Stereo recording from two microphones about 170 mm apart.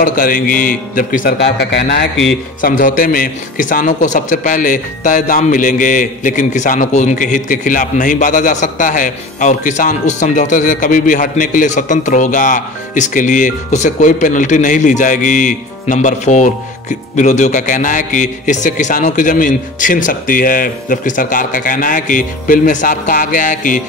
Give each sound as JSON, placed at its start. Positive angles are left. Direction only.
{"t": 0.0, "sound": "a man's voice", "side_deg": 55}
{"t": 1.4, "sound": "a man's voice", "side_deg": 90}
{"t": 2.6, "sound": "a man's voice", "side_deg": 55}